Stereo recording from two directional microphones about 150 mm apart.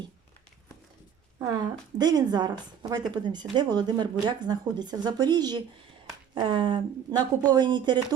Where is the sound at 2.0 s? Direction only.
25° right (ahead or behind).